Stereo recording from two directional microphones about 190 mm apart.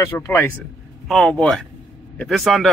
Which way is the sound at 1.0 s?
5° left (ahead or behind).